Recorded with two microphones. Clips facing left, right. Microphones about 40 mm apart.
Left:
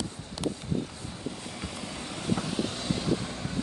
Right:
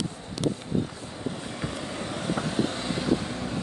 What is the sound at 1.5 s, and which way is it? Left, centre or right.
Vehicle, right.